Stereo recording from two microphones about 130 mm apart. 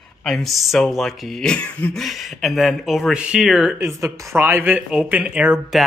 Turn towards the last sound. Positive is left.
turn(degrees=-5)  # may be behind; listen again after turning